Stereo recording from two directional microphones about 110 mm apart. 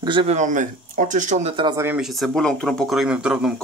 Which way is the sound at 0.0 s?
45° right (ahead or behind).